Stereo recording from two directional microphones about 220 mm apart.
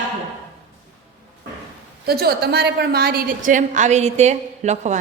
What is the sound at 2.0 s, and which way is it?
A woman's voice, 45° right (ahead or behind).